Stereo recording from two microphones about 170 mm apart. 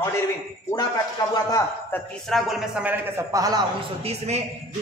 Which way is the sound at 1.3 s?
20° left (ahead or behind).